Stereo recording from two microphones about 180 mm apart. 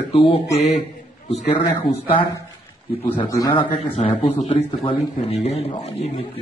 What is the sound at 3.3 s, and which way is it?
Speech, 20° left (ahead or behind).